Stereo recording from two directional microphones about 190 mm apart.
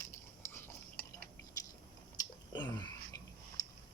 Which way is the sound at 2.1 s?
20° left (ahead or behind).